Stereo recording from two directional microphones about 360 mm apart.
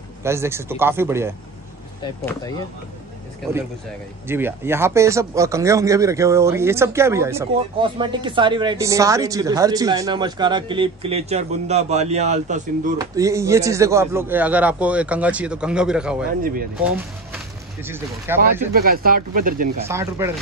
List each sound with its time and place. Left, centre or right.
0.2 s speech: centre
4.3 s speech: centre
13.0 s a man's voice: centre
16.3 s speech: right
16.7 s a man's voice: centre
18.7 s speech: right
19.9 s speech: centre